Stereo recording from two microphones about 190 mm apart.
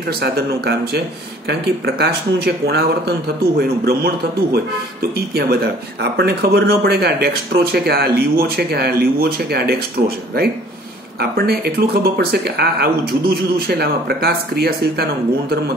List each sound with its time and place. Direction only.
0.2 s speech: 55° right (ahead or behind)
5.1 s speech: 55° right (ahead or behind)